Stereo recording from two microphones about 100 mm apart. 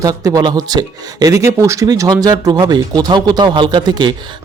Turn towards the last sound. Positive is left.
turn(degrees=-45)  # may be behind; listen again after turning